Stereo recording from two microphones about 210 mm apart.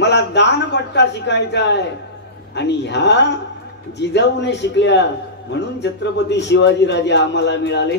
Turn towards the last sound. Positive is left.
turn(degrees=55)  # may be behind; listen again after turning